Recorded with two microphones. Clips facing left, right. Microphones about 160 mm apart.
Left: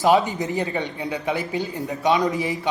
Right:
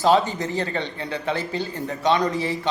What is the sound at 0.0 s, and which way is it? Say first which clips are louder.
A man's voice: left 1 dB; 15° left (ahead or behind).